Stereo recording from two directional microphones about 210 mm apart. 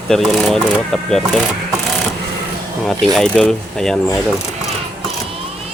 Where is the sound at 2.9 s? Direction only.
5° left (ahead or behind).